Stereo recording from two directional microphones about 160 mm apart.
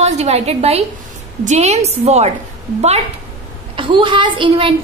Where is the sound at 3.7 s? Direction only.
30° right (ahead or behind).